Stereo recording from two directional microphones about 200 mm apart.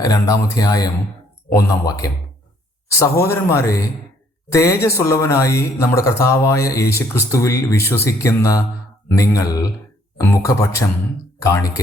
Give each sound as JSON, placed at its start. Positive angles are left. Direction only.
{"t": 0.0, "sound": "speech", "side_deg": 20}